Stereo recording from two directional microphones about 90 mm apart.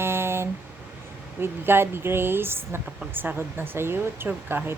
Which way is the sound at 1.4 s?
25° right (ahead or behind).